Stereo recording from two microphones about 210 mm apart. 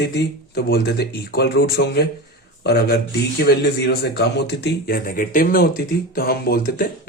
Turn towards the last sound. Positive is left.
turn(degrees=45)  # may be behind; listen again after turning